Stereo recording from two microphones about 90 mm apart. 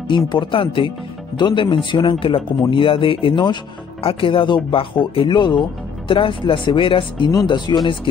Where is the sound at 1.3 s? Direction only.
60° left (ahead or behind).